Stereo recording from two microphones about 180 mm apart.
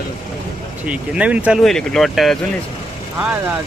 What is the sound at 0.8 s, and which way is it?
Speech, 5° right (ahead or behind).